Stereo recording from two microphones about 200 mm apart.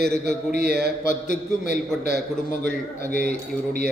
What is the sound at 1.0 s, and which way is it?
Speech, 40° left (ahead or behind).